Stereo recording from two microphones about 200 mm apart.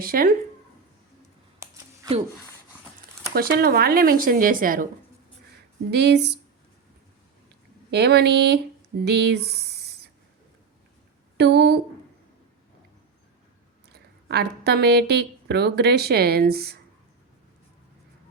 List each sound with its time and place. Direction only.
0.0 s speech: 45° right (ahead or behind)
1.6 s a sound: 15° right (ahead or behind)
3.3 s speech: 50° right (ahead or behind)
5.9 s speech: 55° right (ahead or behind)
7.9 s speech: 55° right (ahead or behind)
11.3 s speech: 55° right (ahead or behind)
13.9 s a woman's voice: 55° right (ahead or behind)